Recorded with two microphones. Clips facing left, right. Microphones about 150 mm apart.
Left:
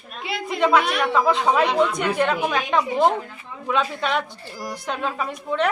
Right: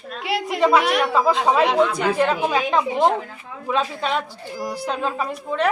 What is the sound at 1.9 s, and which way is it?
Speech, 30° right (ahead or behind).